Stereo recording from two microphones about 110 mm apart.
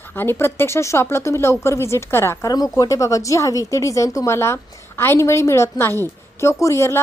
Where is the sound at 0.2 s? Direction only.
20° left (ahead or behind).